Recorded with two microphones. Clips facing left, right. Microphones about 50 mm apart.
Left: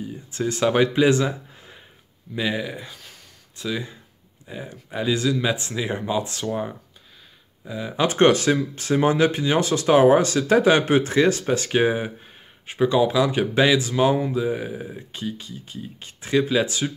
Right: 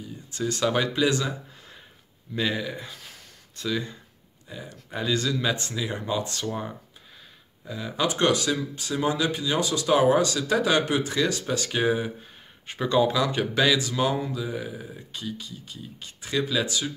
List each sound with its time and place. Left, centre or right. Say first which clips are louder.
0.3 s speech: left 4 dB; left
2.8 s a sound: left 1 dB; centre
4.5 s speech: left 5 dB; left
4.7 s speech: left 3 dB; centre
8.1 s speech: left 7 dB; left
12.6 s speech: left 3 dB; centre
13.6 s speech: left 4 dB; left